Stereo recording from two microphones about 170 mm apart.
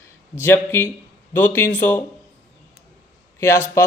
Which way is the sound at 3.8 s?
15° left (ahead or behind).